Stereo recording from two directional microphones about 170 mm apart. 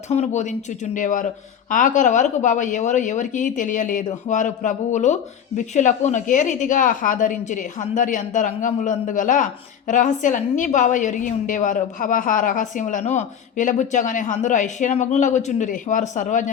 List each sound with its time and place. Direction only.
0.1 s speech: 45° left (ahead or behind)